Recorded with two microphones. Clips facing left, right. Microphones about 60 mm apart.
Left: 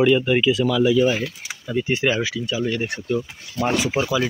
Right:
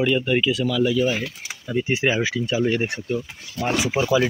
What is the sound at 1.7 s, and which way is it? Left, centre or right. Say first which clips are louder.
Speech: even; centre.